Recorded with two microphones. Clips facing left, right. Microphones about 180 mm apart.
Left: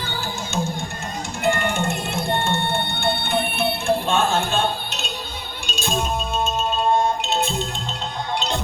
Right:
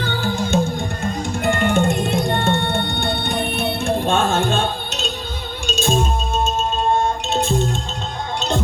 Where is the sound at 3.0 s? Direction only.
50° right (ahead or behind).